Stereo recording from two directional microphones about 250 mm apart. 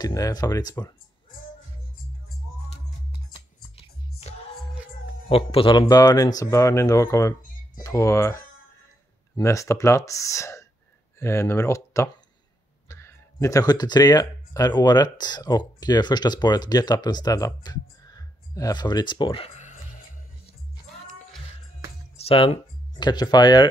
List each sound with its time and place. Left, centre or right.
0.0 s speech: centre
3.7 s music: left
5.3 s speech: left
22.1 s speech: left